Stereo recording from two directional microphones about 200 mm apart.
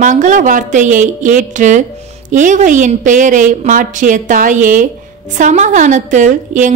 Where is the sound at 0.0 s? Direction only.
40° right (ahead or behind).